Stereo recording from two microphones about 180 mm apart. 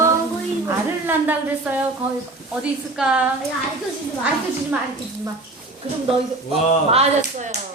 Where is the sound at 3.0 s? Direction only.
5° right (ahead or behind).